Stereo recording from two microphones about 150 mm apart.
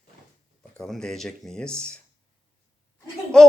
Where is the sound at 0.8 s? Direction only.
5° left (ahead or behind).